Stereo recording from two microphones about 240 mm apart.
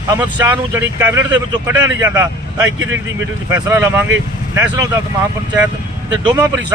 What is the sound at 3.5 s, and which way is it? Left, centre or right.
Speech, centre.